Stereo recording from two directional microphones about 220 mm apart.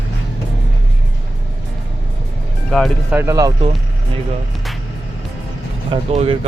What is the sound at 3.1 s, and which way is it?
Speech, 10° right (ahead or behind).